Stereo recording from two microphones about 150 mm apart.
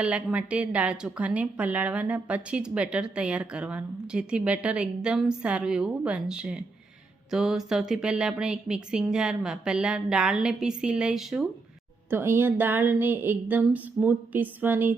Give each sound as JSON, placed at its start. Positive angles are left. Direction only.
{"t": 0.0, "sound": "a woman's voice", "side_deg": -10}
{"t": 12.1, "sound": "a woman's voice", "side_deg": -15}